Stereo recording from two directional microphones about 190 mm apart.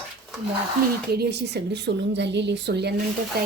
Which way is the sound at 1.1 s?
60° right (ahead or behind).